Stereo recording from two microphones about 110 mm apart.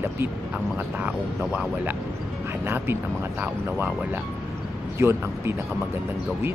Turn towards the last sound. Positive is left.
turn(degrees=-20)  # may be behind; listen again after turning